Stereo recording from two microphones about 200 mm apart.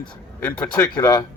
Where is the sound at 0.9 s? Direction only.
20° left (ahead or behind).